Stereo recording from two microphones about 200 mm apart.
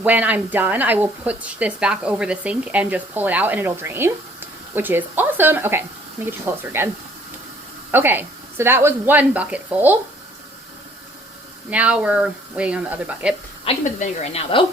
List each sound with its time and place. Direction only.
0.0 s speech: 10° right (ahead or behind)
11.7 s speech: 5° right (ahead or behind)
13.7 s a woman's voice: 35° left (ahead or behind)